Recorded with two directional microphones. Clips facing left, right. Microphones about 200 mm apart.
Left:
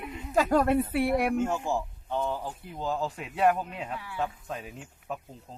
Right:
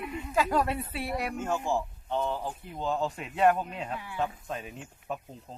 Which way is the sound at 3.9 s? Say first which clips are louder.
Even; 15° right (ahead or behind).